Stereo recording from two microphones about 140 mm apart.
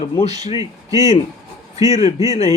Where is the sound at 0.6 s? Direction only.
25° right (ahead or behind).